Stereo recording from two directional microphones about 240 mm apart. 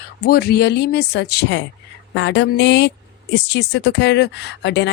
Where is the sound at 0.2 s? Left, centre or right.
Left.